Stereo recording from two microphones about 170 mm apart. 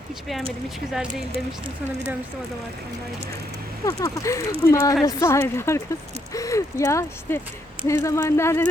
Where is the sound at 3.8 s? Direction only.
20° left (ahead or behind).